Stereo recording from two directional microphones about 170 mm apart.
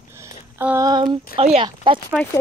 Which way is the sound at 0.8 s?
25° right (ahead or behind).